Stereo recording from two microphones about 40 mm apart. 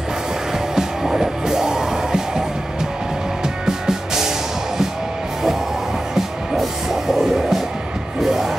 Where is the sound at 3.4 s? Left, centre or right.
Centre.